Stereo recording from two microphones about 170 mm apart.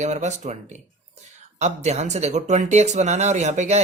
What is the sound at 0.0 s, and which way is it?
Speech, 45° right (ahead or behind).